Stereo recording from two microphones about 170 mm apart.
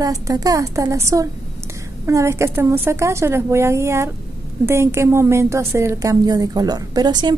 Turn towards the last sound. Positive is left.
turn(degrees=-25)  # may be behind; listen again after turning